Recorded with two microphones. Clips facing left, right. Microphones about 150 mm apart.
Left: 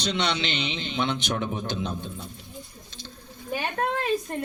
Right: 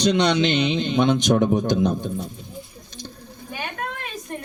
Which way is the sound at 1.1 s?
15° right (ahead or behind).